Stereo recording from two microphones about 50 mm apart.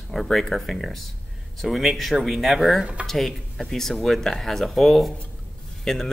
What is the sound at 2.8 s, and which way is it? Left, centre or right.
Speech, right.